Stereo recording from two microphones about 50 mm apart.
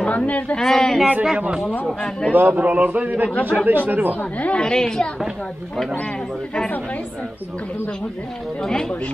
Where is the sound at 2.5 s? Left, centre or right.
Right.